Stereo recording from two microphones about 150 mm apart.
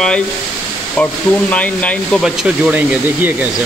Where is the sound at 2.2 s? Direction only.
10° right (ahead or behind).